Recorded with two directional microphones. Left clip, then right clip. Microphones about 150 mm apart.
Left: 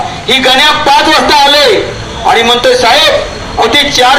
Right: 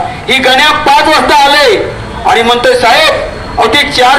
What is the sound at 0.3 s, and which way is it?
A man's voice, 30° right (ahead or behind).